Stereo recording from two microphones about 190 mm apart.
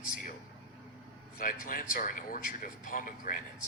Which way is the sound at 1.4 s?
45° left (ahead or behind).